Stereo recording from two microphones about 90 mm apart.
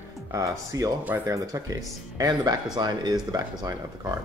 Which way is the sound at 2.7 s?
50° right (ahead or behind).